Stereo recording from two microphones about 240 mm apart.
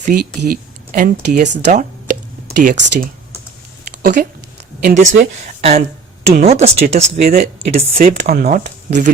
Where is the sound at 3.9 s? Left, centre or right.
Right.